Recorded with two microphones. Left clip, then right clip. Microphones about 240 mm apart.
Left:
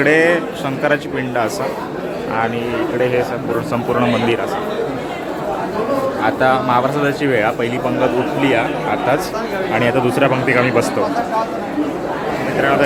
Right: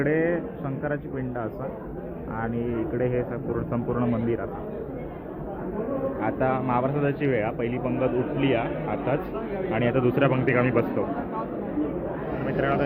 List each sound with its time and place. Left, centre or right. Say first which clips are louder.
0.0 s a man's voice: left 12 dB; left
3.0 s a man's voice: left 10 dB; centre
6.2 s a man's voice: left 11 dB; centre